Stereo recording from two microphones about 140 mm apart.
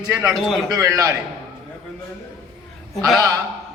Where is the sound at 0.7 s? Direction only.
25° right (ahead or behind).